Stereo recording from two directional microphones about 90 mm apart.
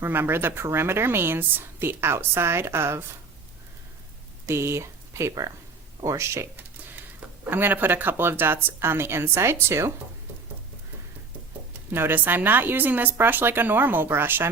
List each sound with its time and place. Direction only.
0.0 s speech: 25° right (ahead or behind)
4.4 s speech: 30° right (ahead or behind)
7.5 s speech: 20° right (ahead or behind)
11.9 s speech: 25° right (ahead or behind)